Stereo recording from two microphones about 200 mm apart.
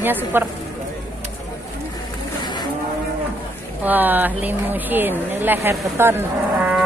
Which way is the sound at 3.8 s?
10° right (ahead or behind).